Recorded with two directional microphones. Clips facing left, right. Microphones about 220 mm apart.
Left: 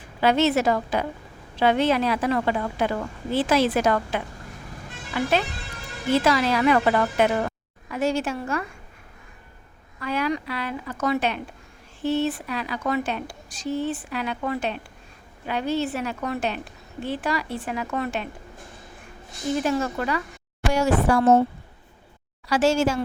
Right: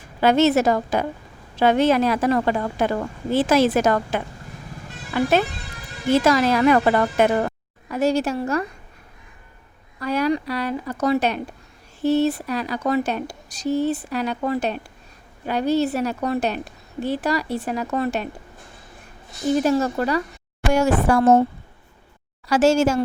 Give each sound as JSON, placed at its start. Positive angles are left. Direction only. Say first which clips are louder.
{"t": 0.2, "sound": "a woman's voice", "louder": "right 4 dB", "side_deg": -45}
{"t": 10.0, "sound": "a woman's voice", "louder": "right 4 dB", "side_deg": -40}
{"t": 19.6, "sound": "a woman's voice", "louder": "right 4 dB", "side_deg": -40}
{"t": 20.7, "sound": "a woman's voice", "louder": "right 2 dB", "side_deg": -50}
{"t": 22.4, "sound": "a woman's voice", "louder": "right 4 dB", "side_deg": -45}